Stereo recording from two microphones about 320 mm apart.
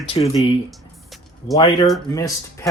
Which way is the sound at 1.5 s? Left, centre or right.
Centre.